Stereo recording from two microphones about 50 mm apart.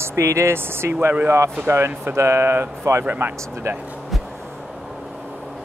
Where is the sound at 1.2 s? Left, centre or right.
Right.